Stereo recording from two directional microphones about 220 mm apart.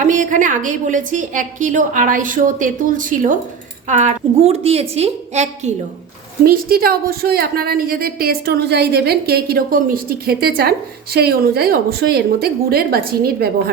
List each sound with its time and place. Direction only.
0.0 s a woman's voice: 35° right (ahead or behind)
6.4 s a woman's voice: 40° right (ahead or behind)